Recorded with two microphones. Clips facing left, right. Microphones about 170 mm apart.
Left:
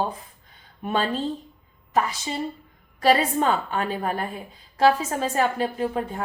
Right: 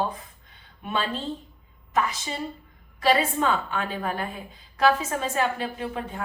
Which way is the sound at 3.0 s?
40° left (ahead or behind).